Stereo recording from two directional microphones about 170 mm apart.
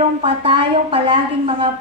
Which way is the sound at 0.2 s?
30° right (ahead or behind).